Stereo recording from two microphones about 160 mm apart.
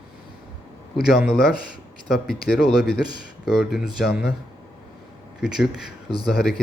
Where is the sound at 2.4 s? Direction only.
75° left (ahead or behind).